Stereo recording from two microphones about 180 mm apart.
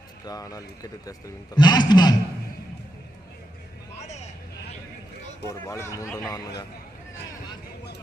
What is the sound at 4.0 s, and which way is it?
Vehicle, 40° left (ahead or behind).